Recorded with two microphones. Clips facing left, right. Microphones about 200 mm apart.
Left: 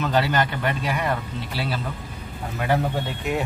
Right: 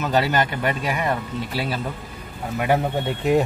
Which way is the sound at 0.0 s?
15° right (ahead or behind).